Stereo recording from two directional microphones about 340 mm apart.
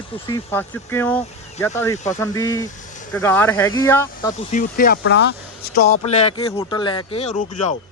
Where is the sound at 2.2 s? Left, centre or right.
Centre.